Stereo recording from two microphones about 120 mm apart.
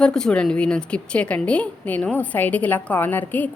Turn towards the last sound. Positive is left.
turn(degrees=15)  # may be behind; listen again after turning